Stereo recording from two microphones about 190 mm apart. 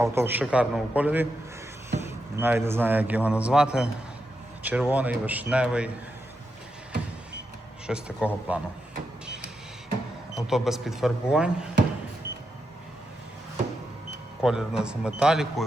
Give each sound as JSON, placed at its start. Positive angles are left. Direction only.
{"t": 0.0, "sound": "speech", "side_deg": -15}
{"t": 7.9, "sound": "speech", "side_deg": -5}
{"t": 10.3, "sound": "speech", "side_deg": 0}
{"t": 14.4, "sound": "speech", "side_deg": -5}